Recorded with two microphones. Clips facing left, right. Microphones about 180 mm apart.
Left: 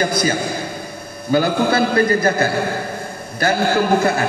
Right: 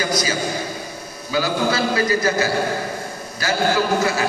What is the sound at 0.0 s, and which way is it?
A man's voice, 55° left (ahead or behind).